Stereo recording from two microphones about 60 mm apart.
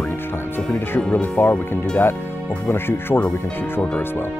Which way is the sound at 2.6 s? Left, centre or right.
Left.